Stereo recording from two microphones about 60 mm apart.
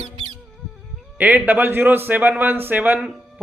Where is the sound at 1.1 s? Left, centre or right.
Right.